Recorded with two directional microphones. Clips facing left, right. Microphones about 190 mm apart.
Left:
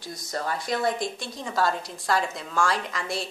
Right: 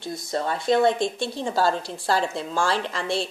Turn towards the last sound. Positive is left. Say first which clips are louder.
# right 5 dB
turn(degrees=-30)  # may be behind; listen again after turning